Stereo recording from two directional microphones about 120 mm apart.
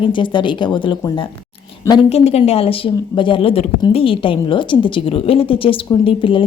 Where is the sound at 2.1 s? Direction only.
55° left (ahead or behind).